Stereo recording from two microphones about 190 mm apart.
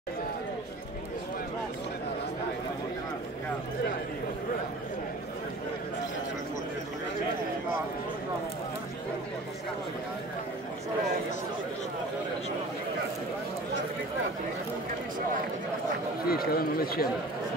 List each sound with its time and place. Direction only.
16.3 s speech: 50° left (ahead or behind)